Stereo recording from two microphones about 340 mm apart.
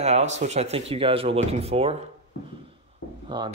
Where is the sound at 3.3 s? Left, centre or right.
Centre.